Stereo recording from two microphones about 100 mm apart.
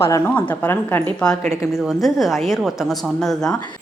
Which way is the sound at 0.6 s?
20° left (ahead or behind).